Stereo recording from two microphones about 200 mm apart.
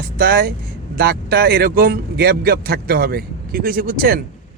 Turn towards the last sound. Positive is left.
turn(degrees=-45)  # may be behind; listen again after turning